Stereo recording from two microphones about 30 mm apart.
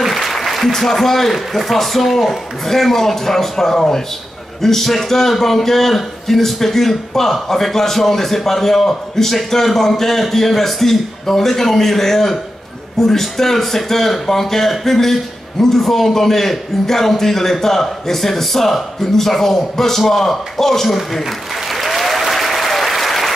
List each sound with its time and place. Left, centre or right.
0.1 s applause: centre
1.3 s a man's voice: centre
21.6 s applause: centre